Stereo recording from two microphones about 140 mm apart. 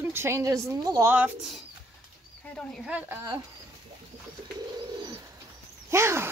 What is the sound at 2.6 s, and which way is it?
Speech, 5° left (ahead or behind).